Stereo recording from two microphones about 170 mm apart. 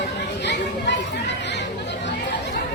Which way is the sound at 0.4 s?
90° left.